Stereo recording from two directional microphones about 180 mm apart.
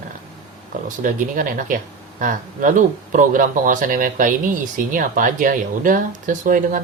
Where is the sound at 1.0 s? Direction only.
50° right (ahead or behind).